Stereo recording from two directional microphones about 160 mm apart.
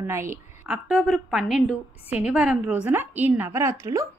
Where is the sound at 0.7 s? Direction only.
5° right (ahead or behind).